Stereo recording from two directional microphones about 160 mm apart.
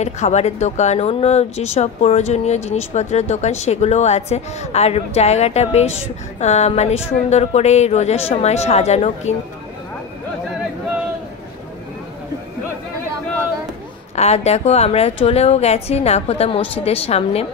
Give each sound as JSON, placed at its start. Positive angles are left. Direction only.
{"t": 0.0, "sound": "speech", "side_deg": 45}
{"t": 14.1, "sound": "a woman's voice", "side_deg": 40}